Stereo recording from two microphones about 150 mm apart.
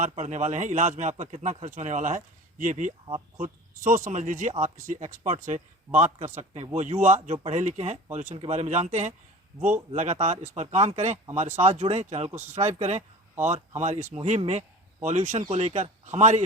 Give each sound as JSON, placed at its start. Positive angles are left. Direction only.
{"t": 0.0, "sound": "speech", "side_deg": -50}